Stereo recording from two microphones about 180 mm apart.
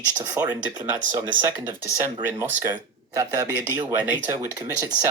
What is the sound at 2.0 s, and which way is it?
Speech, 10° right (ahead or behind).